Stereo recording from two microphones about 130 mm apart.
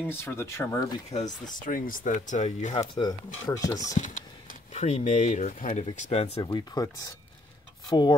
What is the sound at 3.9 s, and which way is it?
Speech, 75° left (ahead or behind).